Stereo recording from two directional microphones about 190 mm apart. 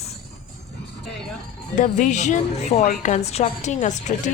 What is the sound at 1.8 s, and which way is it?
Speech, 40° left (ahead or behind).